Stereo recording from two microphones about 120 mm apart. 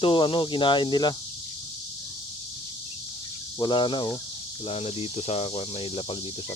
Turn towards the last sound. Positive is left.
turn(degrees=50)  # may be behind; listen again after turning